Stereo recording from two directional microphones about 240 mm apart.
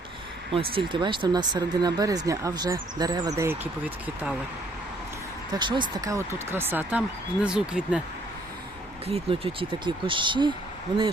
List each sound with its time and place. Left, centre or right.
0.5 s speech: right; by 4.4 s centre
5.5 s speech: centre
9.0 s speech: right